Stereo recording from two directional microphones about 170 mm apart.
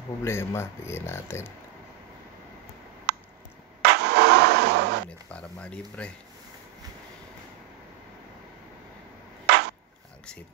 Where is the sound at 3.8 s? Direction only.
75° right (ahead or behind); by 5.0 s 90° right.